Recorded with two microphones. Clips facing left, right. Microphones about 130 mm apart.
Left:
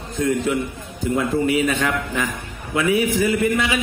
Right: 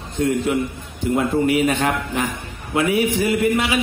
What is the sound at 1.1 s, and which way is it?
A man's voice, 35° right (ahead or behind).